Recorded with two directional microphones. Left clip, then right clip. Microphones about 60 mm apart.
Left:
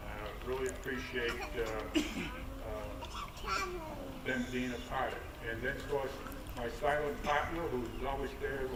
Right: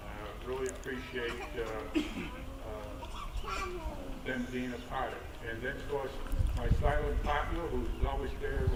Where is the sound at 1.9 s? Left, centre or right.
Left.